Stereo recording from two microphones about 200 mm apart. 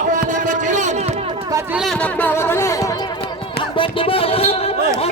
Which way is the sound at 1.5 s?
5° right (ahead or behind).